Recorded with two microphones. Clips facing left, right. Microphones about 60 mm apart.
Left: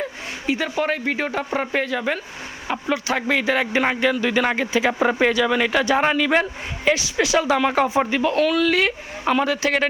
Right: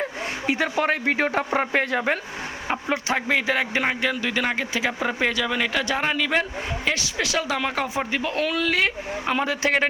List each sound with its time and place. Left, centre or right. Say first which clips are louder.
0.5 s speech: left 1 dB; right
3.1 s a man's voice: left 2 dB; centre
8.4 s speech: left 3 dB; centre